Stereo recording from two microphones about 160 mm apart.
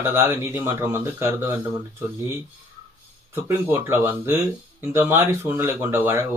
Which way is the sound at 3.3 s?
15° right (ahead or behind).